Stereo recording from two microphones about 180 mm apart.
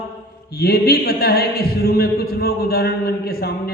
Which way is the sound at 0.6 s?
60° left (ahead or behind).